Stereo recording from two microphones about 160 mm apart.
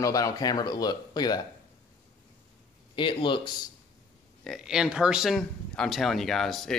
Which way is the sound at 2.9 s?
30° left (ahead or behind).